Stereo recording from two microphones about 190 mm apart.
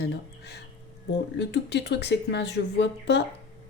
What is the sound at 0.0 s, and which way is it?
Speech, 65° left (ahead or behind).